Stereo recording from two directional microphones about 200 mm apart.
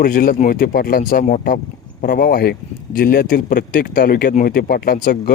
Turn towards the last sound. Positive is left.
turn(degrees=45)  # may be behind; listen again after turning